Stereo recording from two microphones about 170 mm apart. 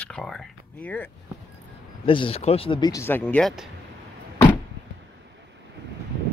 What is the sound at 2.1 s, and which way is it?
Speech, 30° left (ahead or behind).